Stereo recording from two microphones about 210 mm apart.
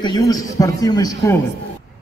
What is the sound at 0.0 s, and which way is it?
Speech, 20° left (ahead or behind).